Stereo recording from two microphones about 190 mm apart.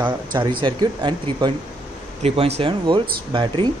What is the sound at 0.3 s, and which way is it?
Speech, 25° right (ahead or behind).